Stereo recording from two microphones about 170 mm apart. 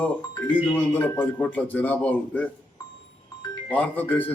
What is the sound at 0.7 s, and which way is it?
A man's voice, 10° left (ahead or behind).